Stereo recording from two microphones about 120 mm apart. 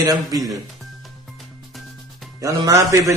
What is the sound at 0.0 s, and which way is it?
Speech, 30° right (ahead or behind).